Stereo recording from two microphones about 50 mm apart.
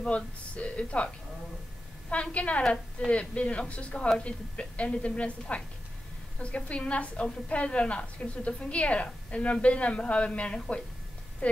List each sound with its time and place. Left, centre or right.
0.0 s a woman's voice: left
2.3 s a woman's voice: left
2.6 s a woman's voice: centre
3.1 s a woman's voice: left